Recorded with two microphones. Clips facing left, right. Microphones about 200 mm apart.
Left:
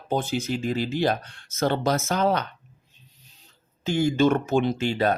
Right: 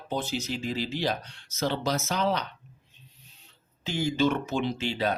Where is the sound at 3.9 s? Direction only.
50° left (ahead or behind).